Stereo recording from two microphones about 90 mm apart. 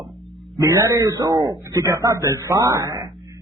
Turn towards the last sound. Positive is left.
turn(degrees=-40)  # may be behind; listen again after turning